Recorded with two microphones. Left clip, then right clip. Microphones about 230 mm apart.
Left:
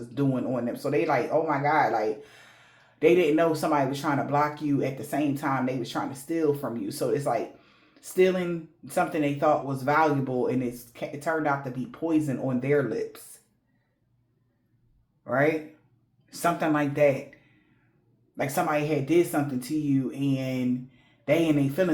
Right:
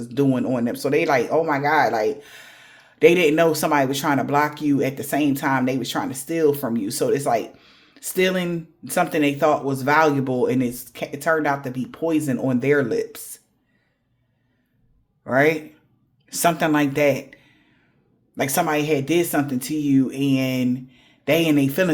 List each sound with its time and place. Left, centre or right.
0.1 s speech: right
15.2 s speech: right
18.3 s speech: right